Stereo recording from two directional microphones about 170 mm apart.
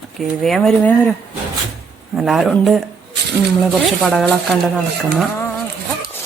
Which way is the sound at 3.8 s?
Centre (ahead or behind).